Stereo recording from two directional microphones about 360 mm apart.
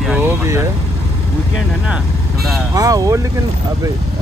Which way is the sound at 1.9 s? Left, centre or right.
Centre.